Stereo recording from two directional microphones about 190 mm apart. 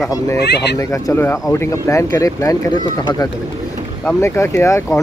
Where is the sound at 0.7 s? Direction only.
15° left (ahead or behind).